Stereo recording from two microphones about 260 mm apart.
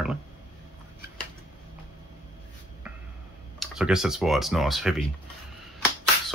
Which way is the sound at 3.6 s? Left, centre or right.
Centre.